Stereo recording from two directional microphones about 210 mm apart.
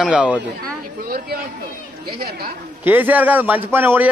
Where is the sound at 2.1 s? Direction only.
45° right (ahead or behind).